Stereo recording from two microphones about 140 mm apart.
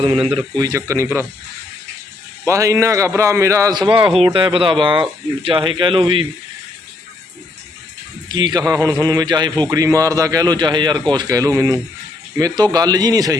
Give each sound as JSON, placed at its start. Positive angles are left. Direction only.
{"t": 0.5, "sound": "a man's voice", "side_deg": -25}
{"t": 2.5, "sound": "a man's voice", "side_deg": -20}
{"t": 8.3, "sound": "a man's voice", "side_deg": -30}